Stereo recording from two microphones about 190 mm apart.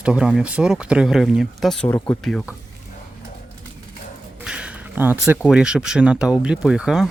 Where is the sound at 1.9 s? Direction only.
15° left (ahead or behind).